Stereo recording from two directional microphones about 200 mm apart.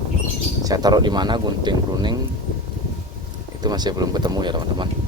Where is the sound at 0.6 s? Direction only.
20° right (ahead or behind).